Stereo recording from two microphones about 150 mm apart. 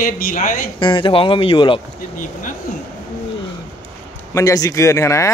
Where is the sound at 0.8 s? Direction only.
30° left (ahead or behind).